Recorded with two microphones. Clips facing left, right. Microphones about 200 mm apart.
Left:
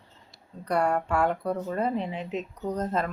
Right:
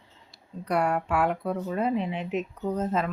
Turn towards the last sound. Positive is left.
turn(degrees=-5)  # may be behind; listen again after turning